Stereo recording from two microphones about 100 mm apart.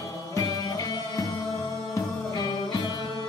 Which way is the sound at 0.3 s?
35° left (ahead or behind).